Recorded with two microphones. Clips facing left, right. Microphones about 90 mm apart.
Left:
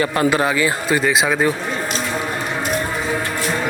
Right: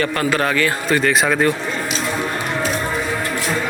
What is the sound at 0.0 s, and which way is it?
A man's voice, 20° left (ahead or behind).